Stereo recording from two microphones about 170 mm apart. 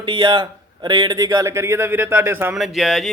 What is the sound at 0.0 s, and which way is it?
A man's voice, 30° right (ahead or behind).